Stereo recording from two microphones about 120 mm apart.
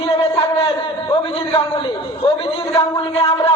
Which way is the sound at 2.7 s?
55° left (ahead or behind).